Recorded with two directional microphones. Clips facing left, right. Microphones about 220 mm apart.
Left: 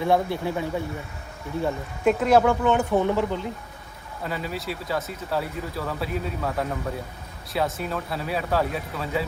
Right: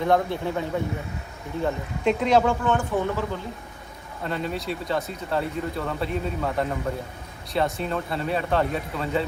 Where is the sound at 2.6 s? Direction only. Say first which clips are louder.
Left 3 dB; 20° left (ahead or behind).